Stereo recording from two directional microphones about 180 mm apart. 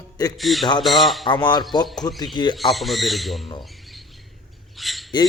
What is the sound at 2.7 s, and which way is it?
Speech, centre (ahead or behind).